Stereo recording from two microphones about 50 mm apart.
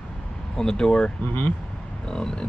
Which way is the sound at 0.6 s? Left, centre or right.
Centre.